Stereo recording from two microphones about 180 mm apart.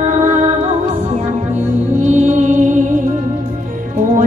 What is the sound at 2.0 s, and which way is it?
Music, 40° right (ahead or behind).